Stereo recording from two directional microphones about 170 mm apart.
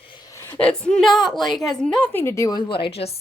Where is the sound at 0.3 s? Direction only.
10° left (ahead or behind).